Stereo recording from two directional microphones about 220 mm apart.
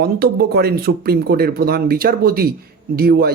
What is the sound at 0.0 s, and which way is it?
A man's voice, 45° right (ahead or behind).